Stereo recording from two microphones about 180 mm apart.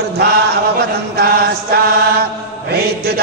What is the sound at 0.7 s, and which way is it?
Chant, 60° right (ahead or behind).